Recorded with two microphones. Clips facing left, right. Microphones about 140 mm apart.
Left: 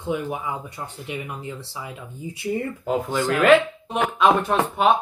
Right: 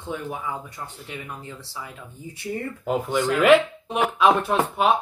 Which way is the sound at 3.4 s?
10° right (ahead or behind).